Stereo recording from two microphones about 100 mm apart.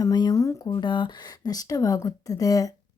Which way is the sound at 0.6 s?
50° left (ahead or behind).